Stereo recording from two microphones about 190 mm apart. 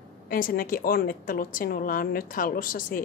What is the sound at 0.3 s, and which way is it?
A woman's voice, 50° left (ahead or behind).